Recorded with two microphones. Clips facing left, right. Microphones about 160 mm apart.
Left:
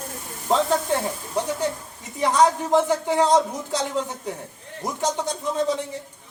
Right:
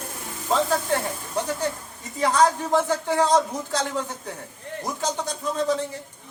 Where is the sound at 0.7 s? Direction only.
25° left (ahead or behind).